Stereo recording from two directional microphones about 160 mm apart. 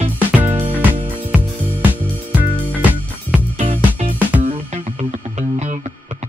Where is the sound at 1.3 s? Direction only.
10° right (ahead or behind).